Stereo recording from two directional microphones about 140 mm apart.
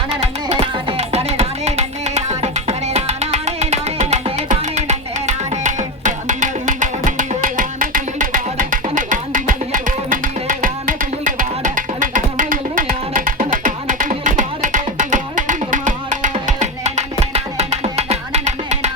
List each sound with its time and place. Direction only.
0.1 s music: 45° right (ahead or behind)